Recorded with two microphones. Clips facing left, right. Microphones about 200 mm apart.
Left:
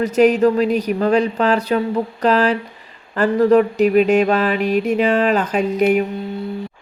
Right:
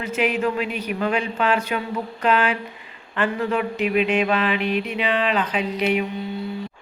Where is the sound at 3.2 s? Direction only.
40° left (ahead or behind).